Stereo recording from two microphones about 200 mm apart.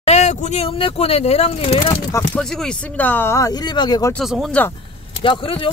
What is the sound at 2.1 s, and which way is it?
Speech, 5° left (ahead or behind).